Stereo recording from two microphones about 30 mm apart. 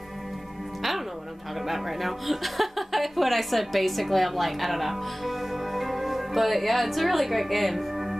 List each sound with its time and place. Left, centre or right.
1.7 s speech: centre